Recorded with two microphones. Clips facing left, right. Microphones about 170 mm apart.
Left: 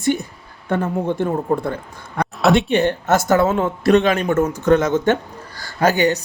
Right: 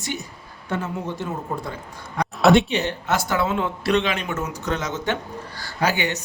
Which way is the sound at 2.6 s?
55° left (ahead or behind).